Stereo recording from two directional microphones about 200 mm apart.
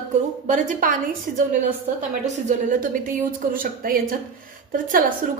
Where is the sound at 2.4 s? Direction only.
40° right (ahead or behind).